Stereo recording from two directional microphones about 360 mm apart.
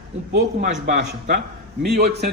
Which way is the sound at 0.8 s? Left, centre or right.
Right.